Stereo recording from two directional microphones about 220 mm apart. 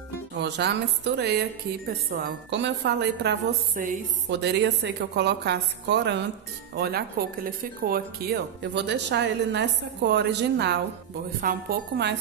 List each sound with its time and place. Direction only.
0.4 s speech: 50° right (ahead or behind)